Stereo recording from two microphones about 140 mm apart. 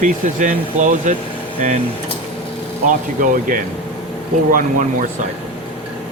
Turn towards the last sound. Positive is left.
turn(degrees=-85)